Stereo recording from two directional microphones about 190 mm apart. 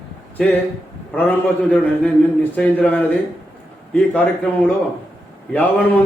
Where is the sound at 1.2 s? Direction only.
10° left (ahead or behind).